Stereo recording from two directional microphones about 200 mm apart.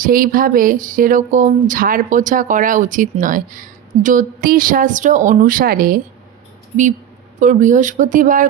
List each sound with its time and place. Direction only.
0.0 s speech: 45° right (ahead or behind)
7.3 s speech: 40° right (ahead or behind)